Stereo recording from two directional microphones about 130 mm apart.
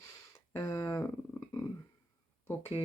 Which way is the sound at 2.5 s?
15° left (ahead or behind).